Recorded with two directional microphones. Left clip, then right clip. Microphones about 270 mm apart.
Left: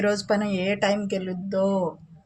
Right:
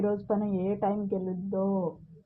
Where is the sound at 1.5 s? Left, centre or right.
Centre.